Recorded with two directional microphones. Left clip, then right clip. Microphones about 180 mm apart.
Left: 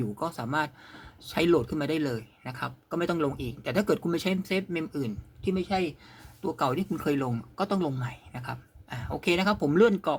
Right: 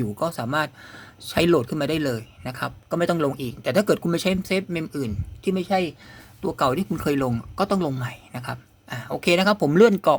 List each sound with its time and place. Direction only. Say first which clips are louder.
0.0 s speech: right 6 dB; 30° right (ahead or behind)